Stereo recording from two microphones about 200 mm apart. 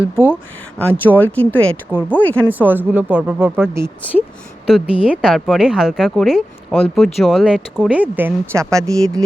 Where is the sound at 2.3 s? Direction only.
10° right (ahead or behind).